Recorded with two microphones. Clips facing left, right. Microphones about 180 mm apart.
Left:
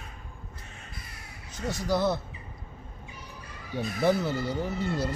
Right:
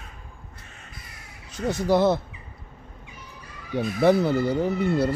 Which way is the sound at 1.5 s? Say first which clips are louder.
Right 7 dB; 60° right (ahead or behind).